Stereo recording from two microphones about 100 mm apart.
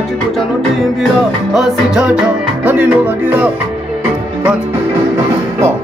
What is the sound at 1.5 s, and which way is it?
Music, 5° right (ahead or behind).